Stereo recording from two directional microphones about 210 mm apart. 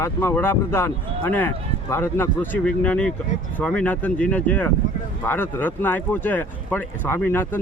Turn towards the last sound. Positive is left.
turn(degrees=10)  # may be behind; listen again after turning